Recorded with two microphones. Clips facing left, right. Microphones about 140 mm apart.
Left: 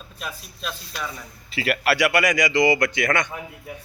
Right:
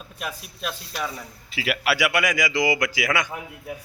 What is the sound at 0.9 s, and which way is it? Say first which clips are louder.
Speech: right 3 dB; 30° right (ahead or behind).